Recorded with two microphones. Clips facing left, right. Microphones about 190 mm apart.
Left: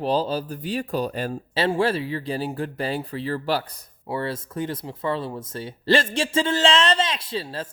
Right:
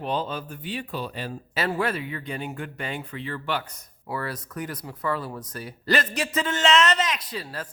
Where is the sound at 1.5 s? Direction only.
30° left (ahead or behind).